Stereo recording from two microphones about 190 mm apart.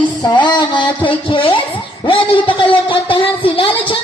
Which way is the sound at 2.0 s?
25° left (ahead or behind).